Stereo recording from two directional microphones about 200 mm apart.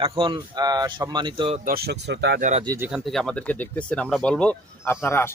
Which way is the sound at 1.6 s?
50° right (ahead or behind).